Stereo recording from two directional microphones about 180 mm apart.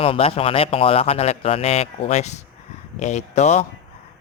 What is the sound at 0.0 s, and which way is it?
A man's voice, 30° left (ahead or behind).